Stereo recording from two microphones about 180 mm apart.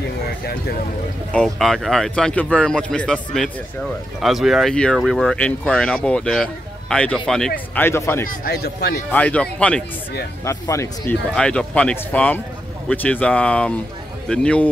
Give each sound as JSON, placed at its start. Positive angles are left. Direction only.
{"t": 1.3, "sound": "speech", "side_deg": 5}
{"t": 8.3, "sound": "speech", "side_deg": 60}
{"t": 9.1, "sound": "speech", "side_deg": 5}
{"t": 11.3, "sound": "speech", "side_deg": 5}